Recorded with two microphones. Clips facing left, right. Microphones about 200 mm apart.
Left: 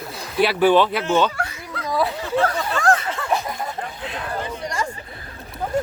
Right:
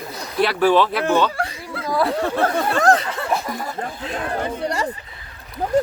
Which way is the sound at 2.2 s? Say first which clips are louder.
Right 2 dB; 60° right (ahead or behind).